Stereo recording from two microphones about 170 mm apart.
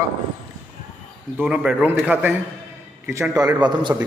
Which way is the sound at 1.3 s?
5° right (ahead or behind).